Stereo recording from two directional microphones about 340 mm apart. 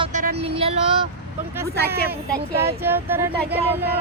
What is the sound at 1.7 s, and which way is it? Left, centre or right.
Speech, right.